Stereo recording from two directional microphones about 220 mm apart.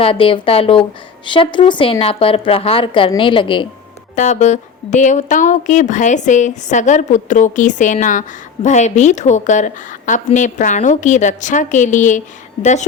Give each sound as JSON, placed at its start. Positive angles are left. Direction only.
{"t": 0.0, "sound": "a woman's voice", "side_deg": 25}
{"t": 4.1, "sound": "speech", "side_deg": 35}